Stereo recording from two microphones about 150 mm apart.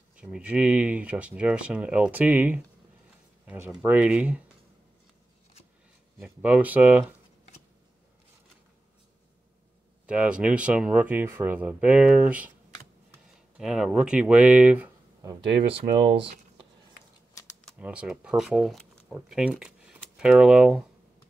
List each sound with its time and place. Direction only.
0.1 s speech: 5° right (ahead or behind)
6.2 s speech: 10° right (ahead or behind)
10.0 s speech: 5° right (ahead or behind)
13.6 s speech: 5° right (ahead or behind)
16.1 s speech: 35° right (ahead or behind)
17.7 s speech: 10° right (ahead or behind)